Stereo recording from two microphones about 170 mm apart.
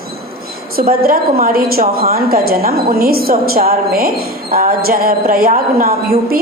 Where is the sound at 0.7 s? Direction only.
60° right (ahead or behind).